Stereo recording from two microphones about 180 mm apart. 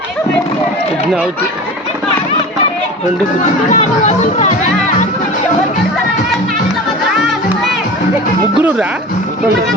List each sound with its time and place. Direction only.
3.7 s speech: 40° left (ahead or behind)